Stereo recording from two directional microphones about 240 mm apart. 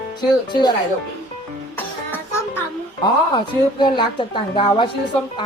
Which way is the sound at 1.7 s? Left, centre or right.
Centre.